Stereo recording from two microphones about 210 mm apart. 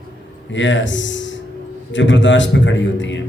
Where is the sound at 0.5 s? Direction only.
60° left (ahead or behind).